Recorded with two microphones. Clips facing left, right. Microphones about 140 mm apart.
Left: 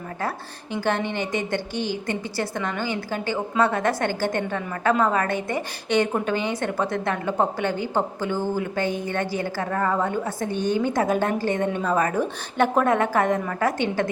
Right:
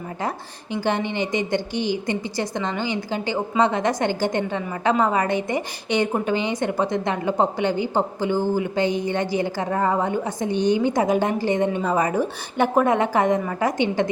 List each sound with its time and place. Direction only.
0.7 s a woman's voice: 15° right (ahead or behind)